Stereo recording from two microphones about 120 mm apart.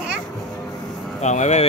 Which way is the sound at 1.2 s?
75° left (ahead or behind).